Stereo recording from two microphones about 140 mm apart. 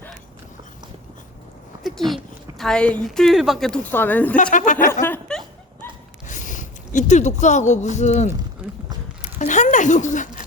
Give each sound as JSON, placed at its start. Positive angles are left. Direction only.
{"t": 1.8, "sound": "a woman's voice", "side_deg": 0}
{"t": 4.5, "sound": "speech", "side_deg": 65}
{"t": 5.0, "sound": "dog", "side_deg": 10}
{"t": 6.2, "sound": "a sound", "side_deg": 65}